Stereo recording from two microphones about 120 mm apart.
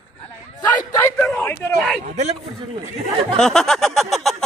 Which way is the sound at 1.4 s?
15° left (ahead or behind).